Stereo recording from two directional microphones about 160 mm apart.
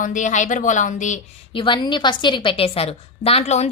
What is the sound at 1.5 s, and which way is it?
A woman's voice, 30° left (ahead or behind).